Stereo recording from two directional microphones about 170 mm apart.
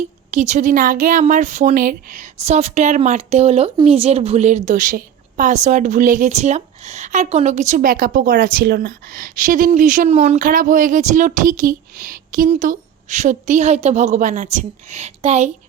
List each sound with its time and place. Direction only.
0.3 s a woman's voice: 45° right (ahead or behind)